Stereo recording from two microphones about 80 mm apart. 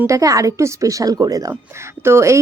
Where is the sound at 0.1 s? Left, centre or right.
Right.